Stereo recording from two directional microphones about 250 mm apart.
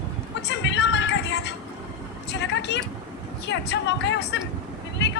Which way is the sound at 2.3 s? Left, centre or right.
Left.